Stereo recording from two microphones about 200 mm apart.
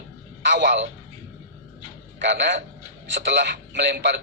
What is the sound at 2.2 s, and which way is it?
A man's voice, 60° right (ahead or behind).